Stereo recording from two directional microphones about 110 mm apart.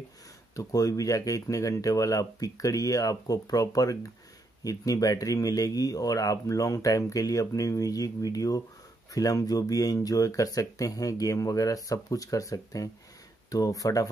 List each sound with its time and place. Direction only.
0.6 s speech: 35° left (ahead or behind)